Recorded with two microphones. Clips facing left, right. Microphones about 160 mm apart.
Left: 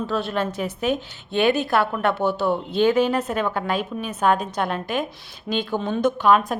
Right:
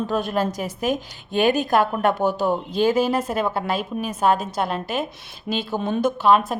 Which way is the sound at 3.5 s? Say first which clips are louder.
Even; 35° right (ahead or behind).